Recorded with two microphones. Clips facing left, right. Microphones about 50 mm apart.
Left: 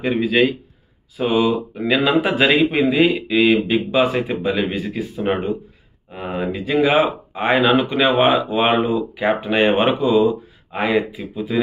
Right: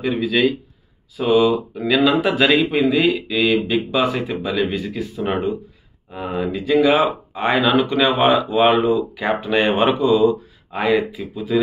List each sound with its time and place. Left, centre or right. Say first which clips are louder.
0.0 s speech: left 1 dB; left
1.1 s speech: right 2 dB; centre